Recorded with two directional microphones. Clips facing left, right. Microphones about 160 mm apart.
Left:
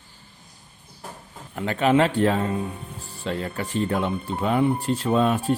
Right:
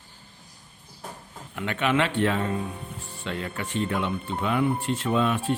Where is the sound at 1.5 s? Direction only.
35° left (ahead or behind).